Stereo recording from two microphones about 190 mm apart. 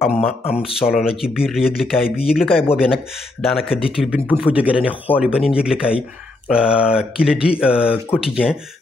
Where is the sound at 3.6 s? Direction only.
30° left (ahead or behind).